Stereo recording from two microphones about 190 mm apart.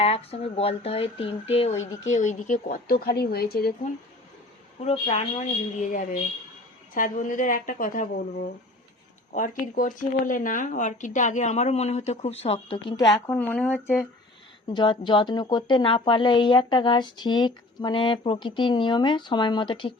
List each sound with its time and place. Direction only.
0.0 s speech: 30° left (ahead or behind); by 3.7 s 55° left (ahead or behind)
4.8 s speech: 35° left (ahead or behind)
13.3 s speech: 10° left (ahead or behind)
14.7 s speech: 25° left (ahead or behind)